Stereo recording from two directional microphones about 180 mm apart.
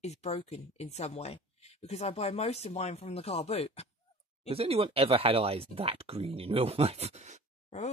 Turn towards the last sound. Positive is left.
turn(degrees=40)  # may be behind; listen again after turning